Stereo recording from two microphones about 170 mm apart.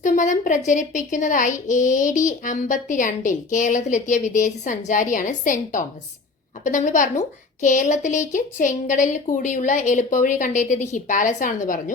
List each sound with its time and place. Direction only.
0.0 s a woman's voice: 50° left (ahead or behind)